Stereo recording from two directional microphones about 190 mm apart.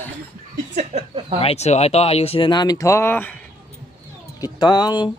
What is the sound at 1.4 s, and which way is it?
Speech, 35° left (ahead or behind).